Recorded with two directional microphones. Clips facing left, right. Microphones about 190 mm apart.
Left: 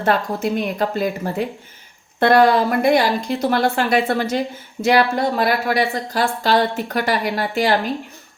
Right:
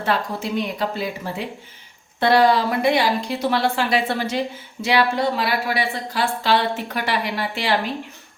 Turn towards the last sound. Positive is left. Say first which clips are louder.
# left 5 dB
turn(degrees=45)  # may be behind; listen again after turning